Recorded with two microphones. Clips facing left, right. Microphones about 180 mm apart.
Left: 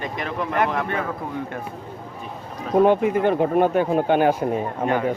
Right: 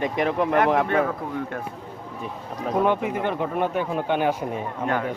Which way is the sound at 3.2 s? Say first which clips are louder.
Left 6 dB; 40° left (ahead or behind).